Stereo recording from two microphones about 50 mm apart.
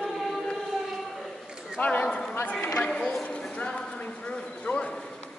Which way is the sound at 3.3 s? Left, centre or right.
Left.